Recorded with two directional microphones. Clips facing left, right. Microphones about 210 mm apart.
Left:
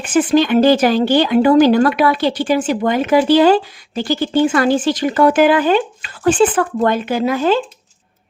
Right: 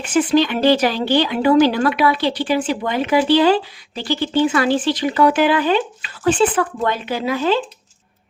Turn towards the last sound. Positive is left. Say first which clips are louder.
# left 3 dB
turn(degrees=50)  # may be behind; listen again after turning